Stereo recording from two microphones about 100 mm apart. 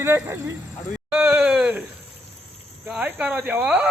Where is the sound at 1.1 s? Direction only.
15° right (ahead or behind).